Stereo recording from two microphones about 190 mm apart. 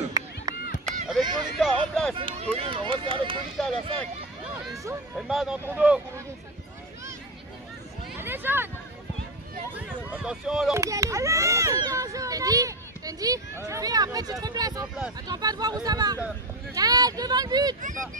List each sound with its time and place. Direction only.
0.2 s chop: 20° right (ahead or behind)
0.8 s a sound: centre (ahead or behind)
1.2 s speech: 25° right (ahead or behind)
1.6 s speech: centre (ahead or behind)
2.1 s speech: 30° right (ahead or behind)
3.6 s speech: 5° left (ahead or behind)
5.1 s speech: centre (ahead or behind)
8.2 s a sound: 10° right (ahead or behind)
10.1 s speech: 5° right (ahead or behind)
10.7 s a child's voice: 15° right (ahead or behind)